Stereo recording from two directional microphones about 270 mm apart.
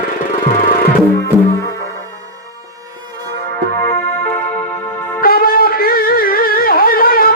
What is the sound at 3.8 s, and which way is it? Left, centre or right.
Music, centre.